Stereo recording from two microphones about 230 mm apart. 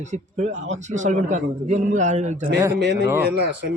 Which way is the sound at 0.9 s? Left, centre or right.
Right.